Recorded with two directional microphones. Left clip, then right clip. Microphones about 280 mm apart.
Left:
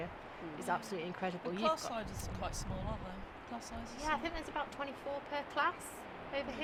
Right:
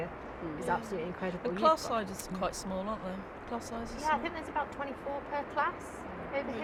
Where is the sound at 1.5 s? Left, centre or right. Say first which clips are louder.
Right 9 dB; right.